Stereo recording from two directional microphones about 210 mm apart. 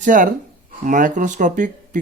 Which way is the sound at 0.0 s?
40° right (ahead or behind).